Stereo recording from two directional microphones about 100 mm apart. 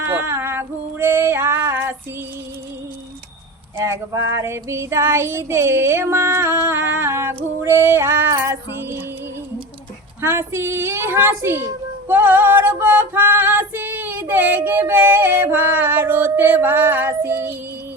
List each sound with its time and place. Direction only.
0.0 s female singing: 25° right (ahead or behind)
3.8 s a child's voice: 30° right (ahead or behind)
10.2 s a child's voice: 25° right (ahead or behind)